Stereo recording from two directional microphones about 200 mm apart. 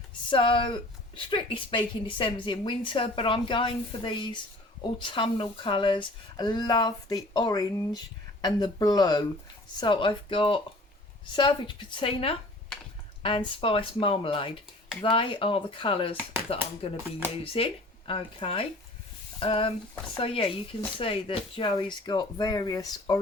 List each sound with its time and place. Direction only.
0.3 s a woman's voice: 25° left (ahead or behind)